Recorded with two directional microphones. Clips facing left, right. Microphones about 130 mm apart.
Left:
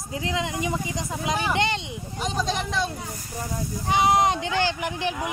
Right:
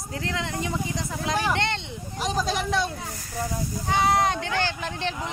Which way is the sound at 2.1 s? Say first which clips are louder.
Right 1 dB; centre (ahead or behind).